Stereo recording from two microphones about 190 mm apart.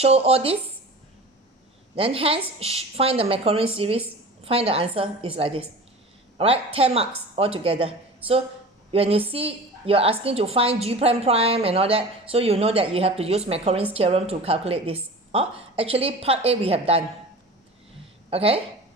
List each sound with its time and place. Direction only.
0.0 s a woman's voice: 30° right (ahead or behind)
2.0 s a woman's voice: 30° right (ahead or behind)
18.3 s speech: 30° right (ahead or behind)